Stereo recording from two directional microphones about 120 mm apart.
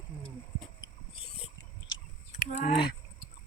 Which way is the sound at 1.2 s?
55° left (ahead or behind).